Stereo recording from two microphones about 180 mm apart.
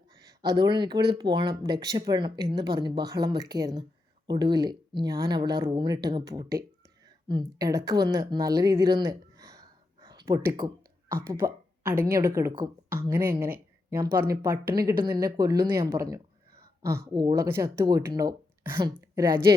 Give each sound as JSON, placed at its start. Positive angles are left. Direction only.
{"t": 0.3, "sound": "speech", "side_deg": -25}
{"t": 9.0, "sound": "a sound", "side_deg": -20}
{"t": 11.1, "sound": "speech", "side_deg": -15}
{"t": 17.4, "sound": "speech", "side_deg": -15}